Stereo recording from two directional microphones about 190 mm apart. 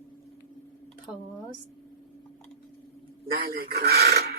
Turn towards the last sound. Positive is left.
turn(degrees=-55)  # may be behind; listen again after turning